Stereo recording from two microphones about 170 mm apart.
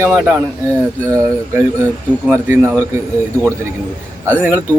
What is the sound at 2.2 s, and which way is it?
Speech, 15° right (ahead or behind).